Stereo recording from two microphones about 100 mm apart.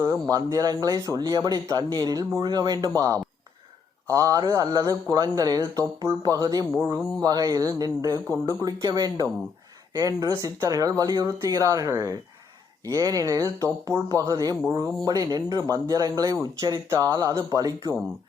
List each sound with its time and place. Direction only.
0.0 s speech: 30° right (ahead or behind)